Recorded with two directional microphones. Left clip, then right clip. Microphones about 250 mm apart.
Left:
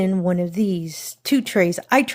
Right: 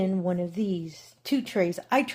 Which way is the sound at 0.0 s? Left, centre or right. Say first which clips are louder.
Left 6 dB; left.